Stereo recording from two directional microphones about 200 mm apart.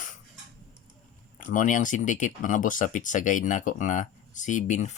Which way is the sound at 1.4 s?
40° left (ahead or behind).